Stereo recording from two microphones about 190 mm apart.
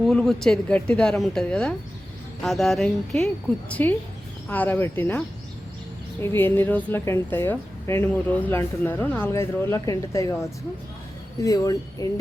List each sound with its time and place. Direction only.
0.0 s a woman's voice: centre (ahead or behind)
6.2 s a woman's voice: 10° left (ahead or behind)